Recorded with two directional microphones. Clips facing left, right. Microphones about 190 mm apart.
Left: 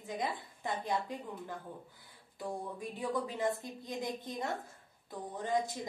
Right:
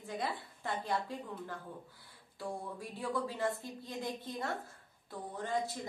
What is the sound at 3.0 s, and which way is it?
A woman's voice, 20° left (ahead or behind).